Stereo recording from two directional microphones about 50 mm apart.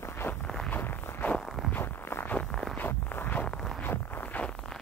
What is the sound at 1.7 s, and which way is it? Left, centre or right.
Walk, left.